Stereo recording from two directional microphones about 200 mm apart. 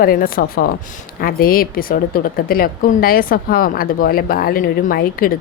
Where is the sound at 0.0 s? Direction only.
45° left (ahead or behind).